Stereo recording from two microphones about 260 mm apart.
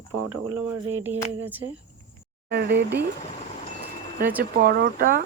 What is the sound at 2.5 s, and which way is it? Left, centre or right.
Speech, right.